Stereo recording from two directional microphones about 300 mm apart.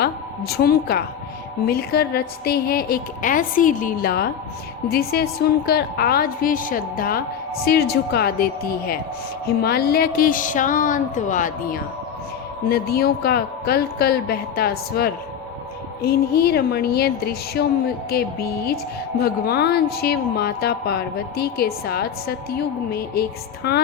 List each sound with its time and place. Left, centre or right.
0.0 s a woman's voice: left